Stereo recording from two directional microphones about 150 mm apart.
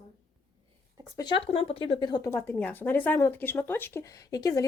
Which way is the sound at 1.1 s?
30° left (ahead or behind).